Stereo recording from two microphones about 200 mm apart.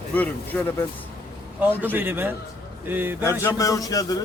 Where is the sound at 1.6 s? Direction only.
10° right (ahead or behind).